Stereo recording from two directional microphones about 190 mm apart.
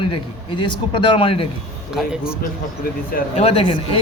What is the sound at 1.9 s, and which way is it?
Speech, 5° right (ahead or behind).